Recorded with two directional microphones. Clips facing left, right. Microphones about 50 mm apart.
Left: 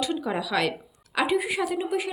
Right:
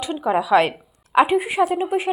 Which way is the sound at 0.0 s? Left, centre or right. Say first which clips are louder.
Right 6 dB; right.